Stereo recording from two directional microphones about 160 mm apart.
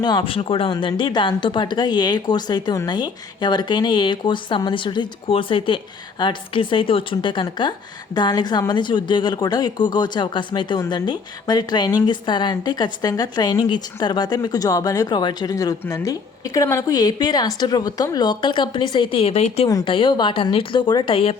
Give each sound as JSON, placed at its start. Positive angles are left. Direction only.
{"t": 0.0, "sound": "speech", "side_deg": 25}
{"t": 19.6, "sound": "a woman's voice", "side_deg": 30}